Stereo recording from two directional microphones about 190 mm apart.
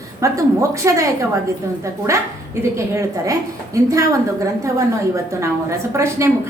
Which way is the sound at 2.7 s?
15° right (ahead or behind).